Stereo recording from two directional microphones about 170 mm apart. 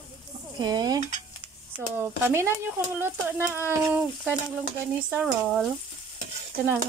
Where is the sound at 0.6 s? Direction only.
25° right (ahead or behind).